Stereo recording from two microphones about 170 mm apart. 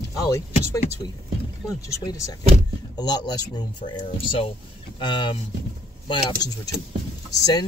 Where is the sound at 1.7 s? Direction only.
20° left (ahead or behind).